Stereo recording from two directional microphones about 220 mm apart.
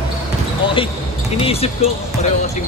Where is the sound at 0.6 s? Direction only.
25° left (ahead or behind).